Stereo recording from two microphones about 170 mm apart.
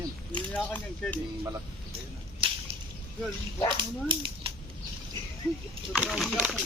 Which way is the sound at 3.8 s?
30° right (ahead or behind).